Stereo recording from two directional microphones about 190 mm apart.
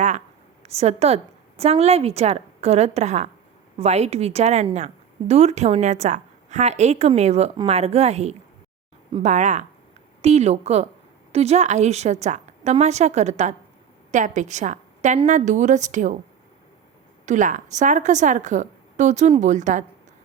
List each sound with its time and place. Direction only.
0.6 s a woman's voice: 35° right (ahead or behind)
17.2 s a woman's voice: 40° right (ahead or behind)